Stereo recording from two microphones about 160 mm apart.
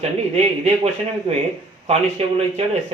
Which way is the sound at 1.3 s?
30° right (ahead or behind).